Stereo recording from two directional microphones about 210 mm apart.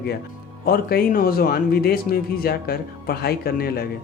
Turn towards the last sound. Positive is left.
turn(degrees=45)  # may be behind; listen again after turning